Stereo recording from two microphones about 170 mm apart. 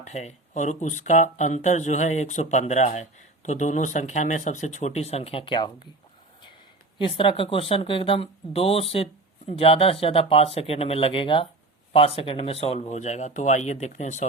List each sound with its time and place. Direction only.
0.0 s speech: 45° left (ahead or behind)
7.0 s speech: 30° left (ahead or behind)